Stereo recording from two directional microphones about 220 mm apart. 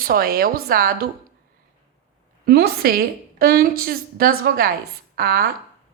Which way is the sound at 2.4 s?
45° right (ahead or behind).